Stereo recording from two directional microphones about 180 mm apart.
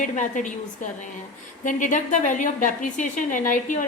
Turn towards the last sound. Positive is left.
turn(degrees=45)  # may be behind; listen again after turning